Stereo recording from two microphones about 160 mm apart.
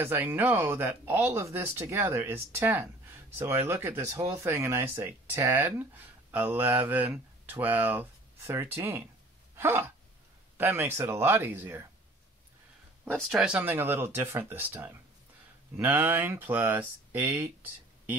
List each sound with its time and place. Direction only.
0.0 s speech: 15° right (ahead or behind)
13.1 s speech: centre (ahead or behind)